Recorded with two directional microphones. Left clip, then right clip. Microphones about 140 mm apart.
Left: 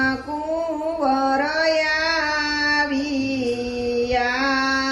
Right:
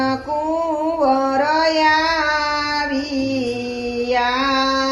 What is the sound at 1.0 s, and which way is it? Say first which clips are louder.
Child singing: right 2 dB; 25° right (ahead or behind).